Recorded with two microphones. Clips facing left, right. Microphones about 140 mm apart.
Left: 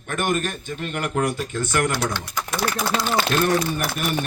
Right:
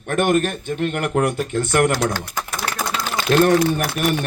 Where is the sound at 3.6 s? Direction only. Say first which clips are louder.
Right 5 dB; 65° right (ahead or behind).